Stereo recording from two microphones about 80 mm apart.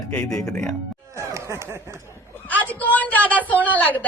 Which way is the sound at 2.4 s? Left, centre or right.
Centre.